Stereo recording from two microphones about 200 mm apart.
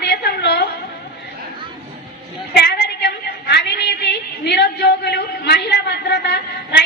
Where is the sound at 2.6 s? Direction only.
55° left (ahead or behind).